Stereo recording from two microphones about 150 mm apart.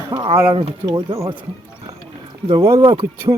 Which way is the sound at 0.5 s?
35° right (ahead or behind).